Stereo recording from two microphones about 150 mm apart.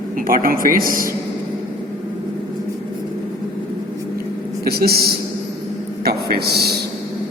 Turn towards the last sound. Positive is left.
turn(degrees=-90)